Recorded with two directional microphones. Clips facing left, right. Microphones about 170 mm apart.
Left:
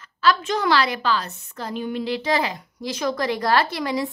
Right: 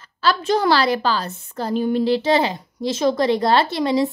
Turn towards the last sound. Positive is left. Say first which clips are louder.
# right 5 dB
turn(degrees=-25)  # may be behind; listen again after turning